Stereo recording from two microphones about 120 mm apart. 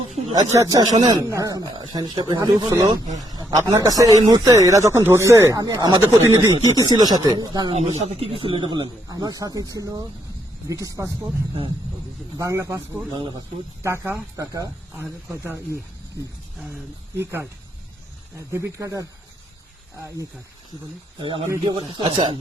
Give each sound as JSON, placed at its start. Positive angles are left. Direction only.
{"t": 0.3, "sound": "speech", "side_deg": -30}
{"t": 7.7, "sound": "speech", "side_deg": -65}
{"t": 12.4, "sound": "speech", "side_deg": -25}
{"t": 14.9, "sound": "speech", "side_deg": -20}
{"t": 17.2, "sound": "speech", "side_deg": -20}
{"t": 21.2, "sound": "speech", "side_deg": -45}